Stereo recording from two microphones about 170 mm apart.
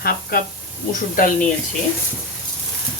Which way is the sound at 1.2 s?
55° left (ahead or behind).